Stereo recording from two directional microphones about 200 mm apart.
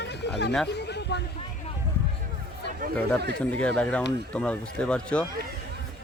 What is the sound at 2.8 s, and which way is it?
Chatter, 45° right (ahead or behind).